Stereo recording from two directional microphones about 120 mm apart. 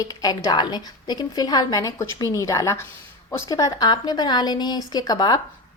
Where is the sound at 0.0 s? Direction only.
30° left (ahead or behind).